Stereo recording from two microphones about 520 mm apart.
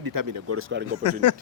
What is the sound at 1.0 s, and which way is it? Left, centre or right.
Speech, left.